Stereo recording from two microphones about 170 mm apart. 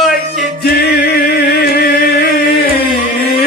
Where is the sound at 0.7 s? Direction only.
70° left (ahead or behind).